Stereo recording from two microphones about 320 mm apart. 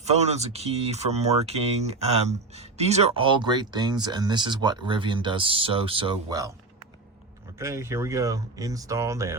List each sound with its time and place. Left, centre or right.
0.0 s speech: centre
7.6 s speech: centre